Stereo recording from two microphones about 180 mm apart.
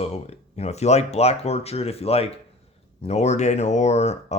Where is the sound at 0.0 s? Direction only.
35° left (ahead or behind).